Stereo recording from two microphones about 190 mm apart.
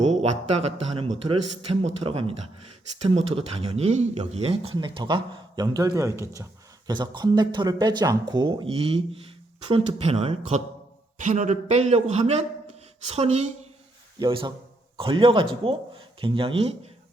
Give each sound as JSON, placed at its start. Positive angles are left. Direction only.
{"t": 0.0, "sound": "a man's voice", "side_deg": -35}
{"t": 11.2, "sound": "a man's voice", "side_deg": -40}
{"t": 14.2, "sound": "speech", "side_deg": -25}